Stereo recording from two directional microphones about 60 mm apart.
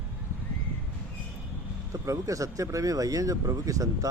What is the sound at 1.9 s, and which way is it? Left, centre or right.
Speech, right.